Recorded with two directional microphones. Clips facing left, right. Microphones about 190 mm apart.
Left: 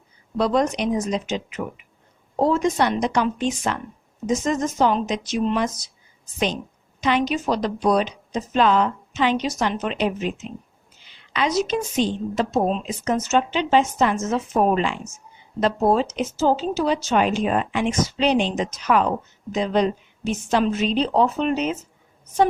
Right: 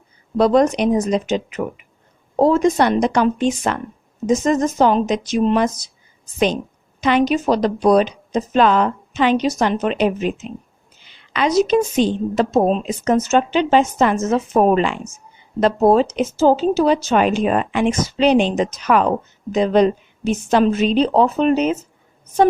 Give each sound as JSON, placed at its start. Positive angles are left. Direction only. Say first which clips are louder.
{"t": 0.3, "sound": "a woman's voice", "louder": "right 6 dB", "side_deg": -50}
{"t": 7.0, "sound": "a woman's voice", "louder": "right 5 dB", "side_deg": -55}